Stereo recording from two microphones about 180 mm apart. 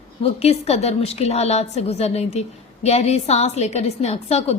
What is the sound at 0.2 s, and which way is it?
A woman's voice, 35° left (ahead or behind).